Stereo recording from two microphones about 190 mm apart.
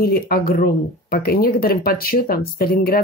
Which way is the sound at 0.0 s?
50° left (ahead or behind).